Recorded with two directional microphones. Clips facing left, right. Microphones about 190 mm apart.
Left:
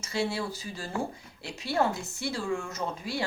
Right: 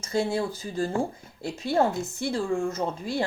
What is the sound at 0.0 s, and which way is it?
Speech, 50° right (ahead or behind).